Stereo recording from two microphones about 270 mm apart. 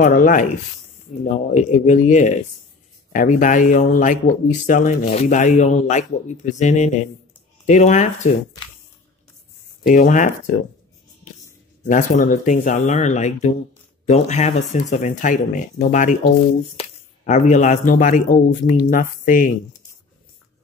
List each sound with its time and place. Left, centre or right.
0.0 s speech: left
9.8 s speech: left
11.9 s speech: left